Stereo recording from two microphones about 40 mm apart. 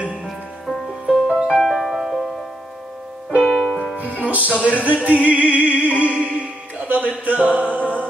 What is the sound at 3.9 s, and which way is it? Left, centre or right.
Music, right.